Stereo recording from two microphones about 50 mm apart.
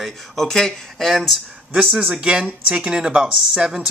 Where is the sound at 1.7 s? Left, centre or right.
Centre.